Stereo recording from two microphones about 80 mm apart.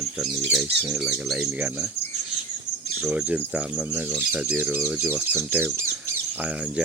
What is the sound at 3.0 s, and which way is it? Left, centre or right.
Speech, centre.